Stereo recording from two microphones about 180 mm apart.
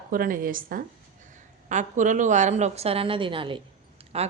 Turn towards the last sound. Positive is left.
turn(degrees=-35)  # may be behind; listen again after turning